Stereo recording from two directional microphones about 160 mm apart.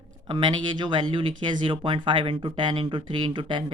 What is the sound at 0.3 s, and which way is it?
Speech, 30° right (ahead or behind).